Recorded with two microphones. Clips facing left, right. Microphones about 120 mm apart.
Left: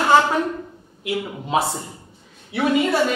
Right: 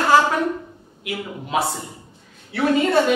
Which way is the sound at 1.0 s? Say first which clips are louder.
Left 3 dB; 30° left (ahead or behind).